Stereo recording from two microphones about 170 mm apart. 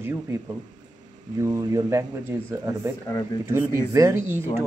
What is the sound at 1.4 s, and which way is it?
Speech, 20° right (ahead or behind).